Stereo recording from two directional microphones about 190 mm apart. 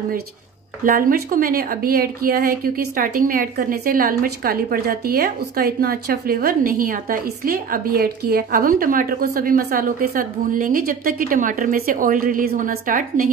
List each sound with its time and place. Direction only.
0.8 s a woman's voice: 45° right (ahead or behind)